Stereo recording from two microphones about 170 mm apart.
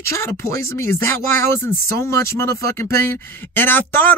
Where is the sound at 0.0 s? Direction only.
15° left (ahead or behind).